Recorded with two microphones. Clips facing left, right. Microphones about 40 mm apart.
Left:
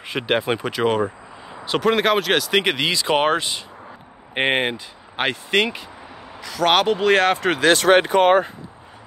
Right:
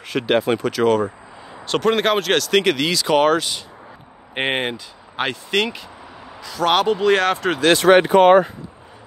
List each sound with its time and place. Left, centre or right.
0.0 s speech: left
1.7 s speech: centre; by 3.4 s left
4.3 s speech: centre
4.7 s speech: centre
6.4 s speech: left
7.1 s speech: centre
7.6 s speech: left